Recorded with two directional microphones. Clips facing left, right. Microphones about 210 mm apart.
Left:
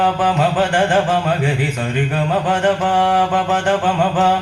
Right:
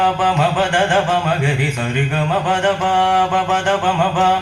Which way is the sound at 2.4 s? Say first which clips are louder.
Left 1 dB; 40° left (ahead or behind).